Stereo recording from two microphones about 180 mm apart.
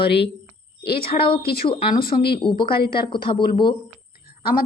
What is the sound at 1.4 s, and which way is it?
Speech, 60° left (ahead or behind).